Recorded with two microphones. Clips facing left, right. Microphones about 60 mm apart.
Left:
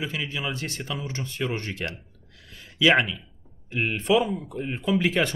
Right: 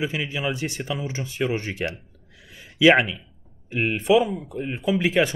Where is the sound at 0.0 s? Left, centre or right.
Centre.